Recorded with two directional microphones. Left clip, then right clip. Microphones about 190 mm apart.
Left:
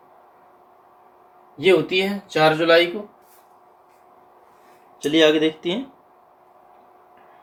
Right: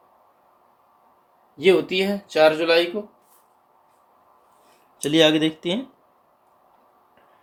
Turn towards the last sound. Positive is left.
turn(degrees=-55)  # may be behind; listen again after turning